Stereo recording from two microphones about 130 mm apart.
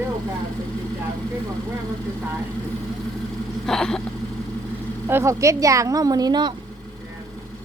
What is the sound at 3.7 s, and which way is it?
Vehicle, 5° left (ahead or behind).